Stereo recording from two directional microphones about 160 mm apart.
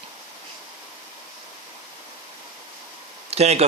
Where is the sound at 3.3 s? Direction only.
40° right (ahead or behind).